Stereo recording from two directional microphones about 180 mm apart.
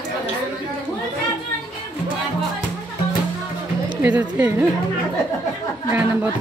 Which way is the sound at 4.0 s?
10° right (ahead or behind).